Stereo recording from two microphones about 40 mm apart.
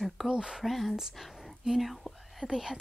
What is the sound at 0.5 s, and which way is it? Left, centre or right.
Speech, centre.